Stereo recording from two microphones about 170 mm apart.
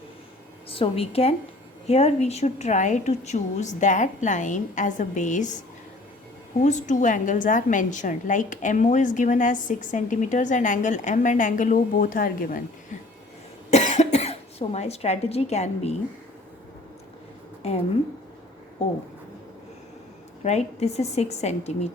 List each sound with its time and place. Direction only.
0.7 s a woman's voice: 35° left (ahead or behind)
6.6 s a woman's voice: 45° left (ahead or behind)
13.7 s cough: 40° left (ahead or behind)
17.6 s a woman's voice: 35° left (ahead or behind)
20.4 s speech: 40° left (ahead or behind)